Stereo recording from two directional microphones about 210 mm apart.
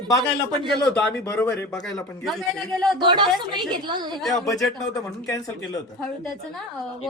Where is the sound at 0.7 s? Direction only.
5° left (ahead or behind).